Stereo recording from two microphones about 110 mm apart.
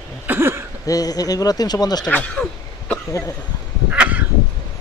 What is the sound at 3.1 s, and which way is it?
Speech, 30° left (ahead or behind).